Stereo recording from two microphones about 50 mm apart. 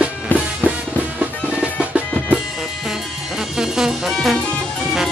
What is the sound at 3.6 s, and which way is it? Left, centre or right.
Music, centre.